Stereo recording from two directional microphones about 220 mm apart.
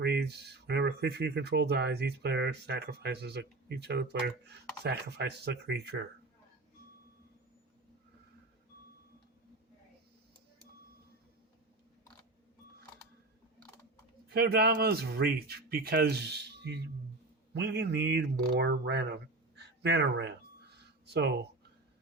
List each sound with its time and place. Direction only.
0.0 s speech: 50° right (ahead or behind)
14.3 s speech: 45° right (ahead or behind)